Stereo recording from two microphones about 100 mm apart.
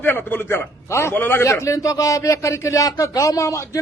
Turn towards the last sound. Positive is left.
turn(degrees=30)  # may be behind; listen again after turning